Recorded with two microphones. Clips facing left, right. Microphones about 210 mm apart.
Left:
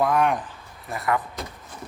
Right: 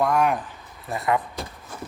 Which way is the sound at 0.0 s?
Centre (ahead or behind).